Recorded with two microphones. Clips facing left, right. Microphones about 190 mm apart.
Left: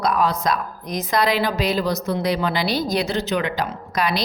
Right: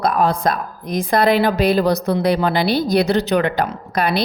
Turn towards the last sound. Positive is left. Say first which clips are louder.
# right 4 dB
turn(degrees=-55)  # may be behind; listen again after turning